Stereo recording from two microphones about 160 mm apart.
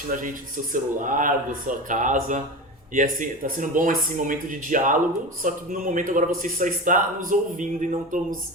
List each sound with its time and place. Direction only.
0.1 s a man's voice: 55° right (ahead or behind)